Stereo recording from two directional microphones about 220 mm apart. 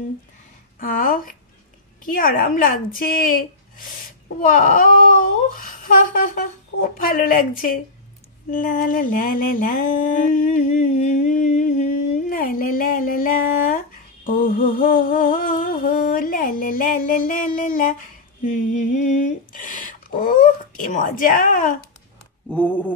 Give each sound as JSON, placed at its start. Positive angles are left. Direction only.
{"t": 0.7, "sound": "a sound", "side_deg": 40}
{"t": 18.4, "sound": "speech", "side_deg": 35}
{"t": 22.5, "sound": "speech", "side_deg": 10}